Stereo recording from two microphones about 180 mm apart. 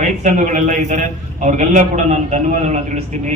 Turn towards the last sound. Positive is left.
turn(degrees=-40)  # may be behind; listen again after turning